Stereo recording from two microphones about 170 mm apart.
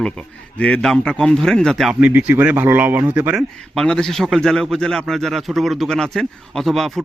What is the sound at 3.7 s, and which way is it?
A man's voice, 5° left (ahead or behind).